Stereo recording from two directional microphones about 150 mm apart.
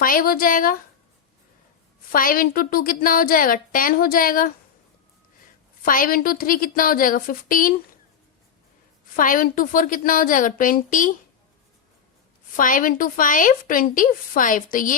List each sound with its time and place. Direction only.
0.0 s a woman's voice: 70° left (ahead or behind)
2.1 s a woman's voice: 70° left (ahead or behind)
5.8 s a woman's voice: 70° left (ahead or behind)
9.1 s a woman's voice: 65° left (ahead or behind)
12.5 s a woman's voice: 65° left (ahead or behind)